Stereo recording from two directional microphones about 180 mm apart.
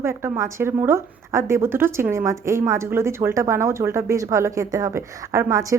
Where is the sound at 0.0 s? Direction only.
15° right (ahead or behind).